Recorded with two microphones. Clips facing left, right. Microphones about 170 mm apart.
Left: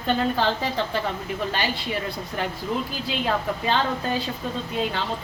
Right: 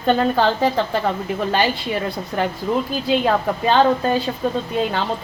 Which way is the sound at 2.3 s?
55° right (ahead or behind).